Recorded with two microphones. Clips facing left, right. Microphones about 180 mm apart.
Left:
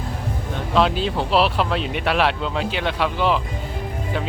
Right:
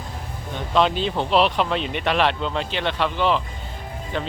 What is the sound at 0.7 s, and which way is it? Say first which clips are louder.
Speech: left 1 dB; 5° left (ahead or behind).